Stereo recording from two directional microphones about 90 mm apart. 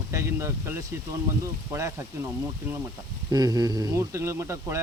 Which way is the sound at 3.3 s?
45° right (ahead or behind).